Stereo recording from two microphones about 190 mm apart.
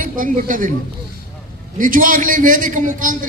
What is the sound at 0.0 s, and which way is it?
Speech, 45° right (ahead or behind).